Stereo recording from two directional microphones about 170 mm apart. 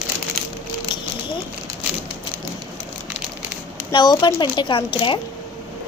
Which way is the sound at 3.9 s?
25° left (ahead or behind).